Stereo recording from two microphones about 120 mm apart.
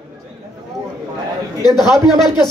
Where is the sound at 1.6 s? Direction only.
35° left (ahead or behind).